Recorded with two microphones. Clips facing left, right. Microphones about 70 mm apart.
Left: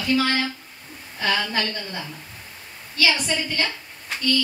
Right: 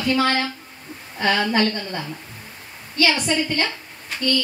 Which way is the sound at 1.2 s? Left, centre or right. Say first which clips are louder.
Right 5 dB; right.